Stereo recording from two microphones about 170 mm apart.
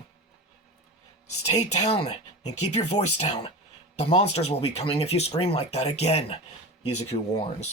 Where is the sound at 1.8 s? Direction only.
35° left (ahead or behind).